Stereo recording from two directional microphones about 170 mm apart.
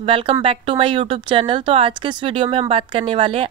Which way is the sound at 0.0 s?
30° right (ahead or behind).